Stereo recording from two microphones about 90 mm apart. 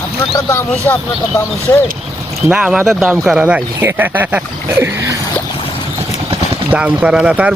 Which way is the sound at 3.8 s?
25° right (ahead or behind).